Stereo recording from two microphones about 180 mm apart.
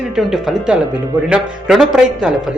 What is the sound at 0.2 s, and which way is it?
Speech, centre (ahead or behind).